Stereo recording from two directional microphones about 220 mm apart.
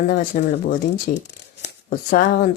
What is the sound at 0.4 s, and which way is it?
Speech, 50° left (ahead or behind).